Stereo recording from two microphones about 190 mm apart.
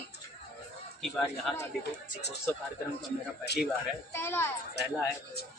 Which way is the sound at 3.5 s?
60° left (ahead or behind).